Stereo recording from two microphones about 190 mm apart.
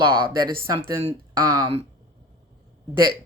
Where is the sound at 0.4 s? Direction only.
25° right (ahead or behind).